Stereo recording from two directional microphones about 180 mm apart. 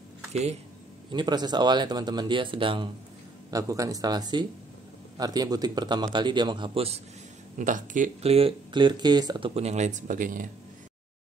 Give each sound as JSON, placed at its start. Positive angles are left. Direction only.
{"t": 0.3, "sound": "speech", "side_deg": -35}
{"t": 1.1, "sound": "a man's voice", "side_deg": -25}
{"t": 7.5, "sound": "speech", "side_deg": -45}
{"t": 9.5, "sound": "speech", "side_deg": -35}